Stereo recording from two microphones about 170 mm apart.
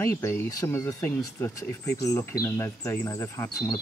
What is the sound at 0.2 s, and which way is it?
Speech, 15° left (ahead or behind).